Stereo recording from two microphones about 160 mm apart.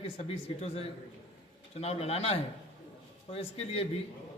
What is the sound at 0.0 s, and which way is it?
A man's voice, 40° left (ahead or behind).